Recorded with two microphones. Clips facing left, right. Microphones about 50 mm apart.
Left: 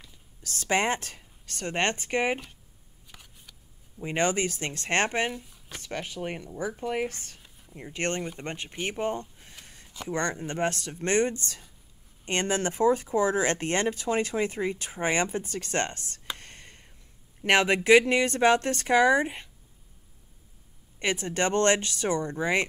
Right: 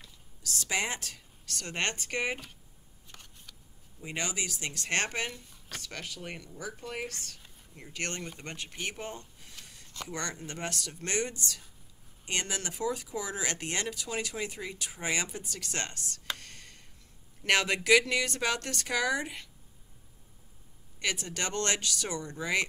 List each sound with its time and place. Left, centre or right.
0.4 s speech: left
3.1 s a sound: centre
4.0 s speech: left
16.3 s whispering: left
17.5 s speech: left
21.0 s speech: left